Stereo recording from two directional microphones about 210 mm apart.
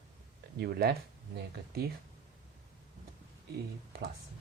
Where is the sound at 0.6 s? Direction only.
50° right (ahead or behind).